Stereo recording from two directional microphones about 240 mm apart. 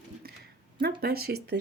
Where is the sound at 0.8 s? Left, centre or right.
Right.